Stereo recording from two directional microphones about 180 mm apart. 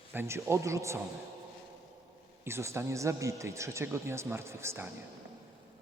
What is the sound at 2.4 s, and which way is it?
A man's voice, 15° right (ahead or behind).